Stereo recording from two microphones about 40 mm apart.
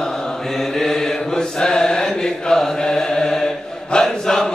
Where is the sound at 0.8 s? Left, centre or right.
Centre.